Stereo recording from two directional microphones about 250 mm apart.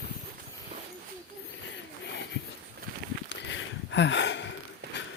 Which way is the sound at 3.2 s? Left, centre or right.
Left.